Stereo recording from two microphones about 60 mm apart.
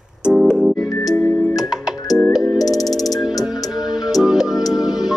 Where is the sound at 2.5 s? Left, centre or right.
Left.